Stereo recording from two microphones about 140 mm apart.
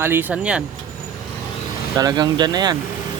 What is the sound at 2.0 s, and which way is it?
Speech, 30° right (ahead or behind).